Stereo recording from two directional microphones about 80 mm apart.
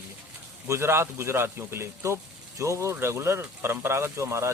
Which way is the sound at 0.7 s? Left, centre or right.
Right.